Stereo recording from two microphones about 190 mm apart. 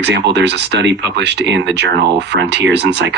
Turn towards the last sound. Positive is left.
turn(degrees=-65)  # may be behind; listen again after turning